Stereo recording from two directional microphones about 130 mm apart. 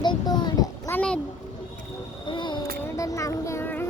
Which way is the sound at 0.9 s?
10° left (ahead or behind).